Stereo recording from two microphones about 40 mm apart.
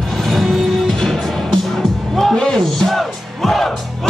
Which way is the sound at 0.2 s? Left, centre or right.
Centre.